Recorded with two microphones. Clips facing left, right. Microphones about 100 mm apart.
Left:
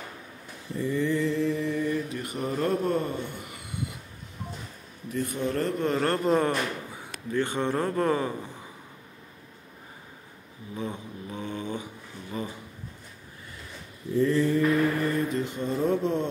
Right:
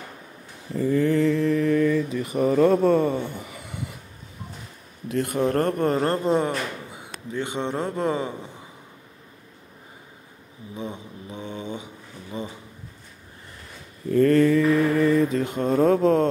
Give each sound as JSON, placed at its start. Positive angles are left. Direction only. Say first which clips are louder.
{"t": 0.7, "sound": "mantra", "louder": "right 6 dB", "side_deg": -55}
{"t": 5.0, "sound": "speech", "louder": "right 5 dB", "side_deg": -75}
{"t": 5.4, "sound": "speech", "louder": "right 6 dB", "side_deg": -55}
{"t": 5.9, "sound": "a man's voice", "louder": "right 2 dB", "side_deg": -30}
{"t": 10.8, "sound": "speech", "louder": "even", "side_deg": -20}
{"t": 14.0, "sound": "mantra", "louder": "right 6 dB", "side_deg": -65}
{"t": 14.7, "sound": "mantra", "louder": "right 5 dB", "side_deg": -90}